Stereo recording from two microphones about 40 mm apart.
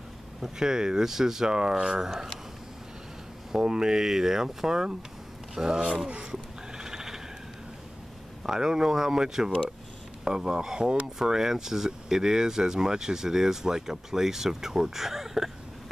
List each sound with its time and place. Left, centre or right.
0.4 s speech: centre
3.5 s speech: centre
6.8 s a sound: centre
8.5 s speech: centre
9.2 s speech: centre